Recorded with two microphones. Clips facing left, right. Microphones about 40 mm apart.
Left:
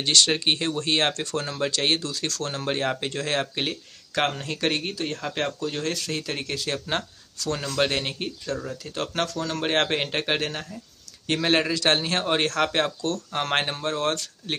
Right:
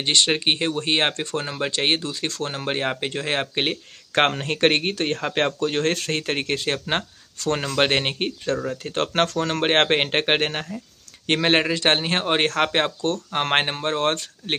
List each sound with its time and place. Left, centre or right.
0.0 s speech: right